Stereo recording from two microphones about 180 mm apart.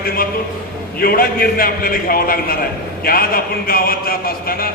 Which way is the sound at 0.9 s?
55° left (ahead or behind).